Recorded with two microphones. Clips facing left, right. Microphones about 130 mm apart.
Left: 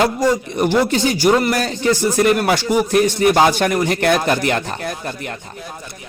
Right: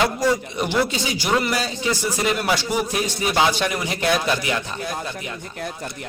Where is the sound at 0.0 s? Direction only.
50° left (ahead or behind).